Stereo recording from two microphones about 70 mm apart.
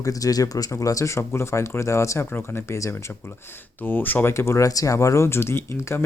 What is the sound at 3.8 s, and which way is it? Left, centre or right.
Speech, left.